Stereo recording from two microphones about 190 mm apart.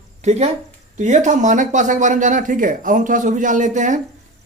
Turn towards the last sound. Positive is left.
turn(degrees=-40)  # may be behind; listen again after turning